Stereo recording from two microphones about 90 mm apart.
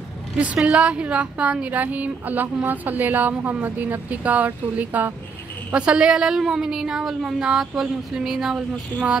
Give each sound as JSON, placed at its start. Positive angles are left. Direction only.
{"t": 0.6, "sound": "a woman's voice", "side_deg": -10}